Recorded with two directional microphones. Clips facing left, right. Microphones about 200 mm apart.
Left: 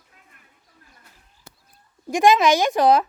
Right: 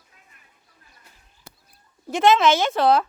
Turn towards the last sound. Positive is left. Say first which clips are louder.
# left 2 dB
turn(degrees=15)  # may be behind; listen again after turning